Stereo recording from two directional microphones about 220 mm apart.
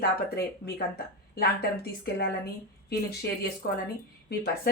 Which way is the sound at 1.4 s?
45° left (ahead or behind).